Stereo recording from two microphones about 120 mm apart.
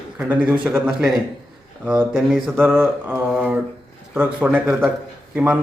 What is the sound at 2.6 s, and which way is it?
A man's voice, 15° right (ahead or behind).